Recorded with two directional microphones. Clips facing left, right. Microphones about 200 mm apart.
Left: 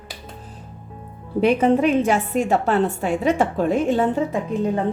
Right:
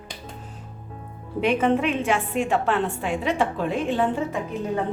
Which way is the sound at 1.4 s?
40° left (ahead or behind).